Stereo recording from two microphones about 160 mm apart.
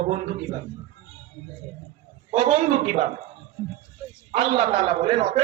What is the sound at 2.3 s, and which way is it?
Speech, 40° right (ahead or behind).